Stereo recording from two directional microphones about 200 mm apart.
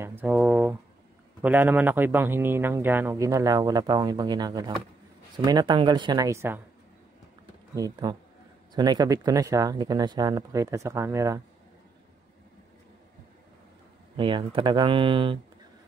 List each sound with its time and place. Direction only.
0.0 s a sound: 10° right (ahead or behind)
1.4 s speech: 10° right (ahead or behind)
7.7 s speech: 20° right (ahead or behind)
14.1 s speech: 25° right (ahead or behind)